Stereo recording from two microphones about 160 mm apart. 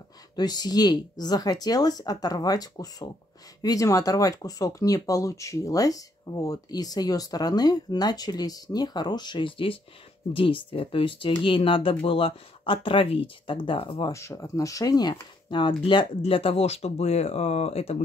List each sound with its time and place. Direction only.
0.4 s speech: 25° left (ahead or behind)
14.1 s speech: 20° left (ahead or behind); by 17.9 s 40° left (ahead or behind)